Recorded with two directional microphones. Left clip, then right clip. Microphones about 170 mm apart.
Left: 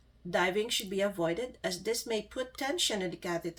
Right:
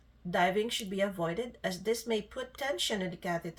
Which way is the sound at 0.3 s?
35° left (ahead or behind).